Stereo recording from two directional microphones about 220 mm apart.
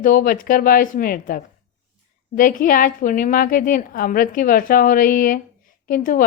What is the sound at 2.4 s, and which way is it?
Speech, 40° left (ahead or behind).